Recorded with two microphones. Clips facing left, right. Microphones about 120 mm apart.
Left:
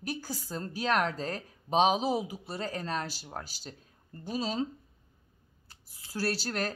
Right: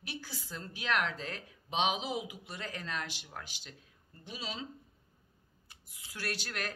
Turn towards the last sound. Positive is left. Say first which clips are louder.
# left 7 dB
turn(degrees=35)  # may be behind; listen again after turning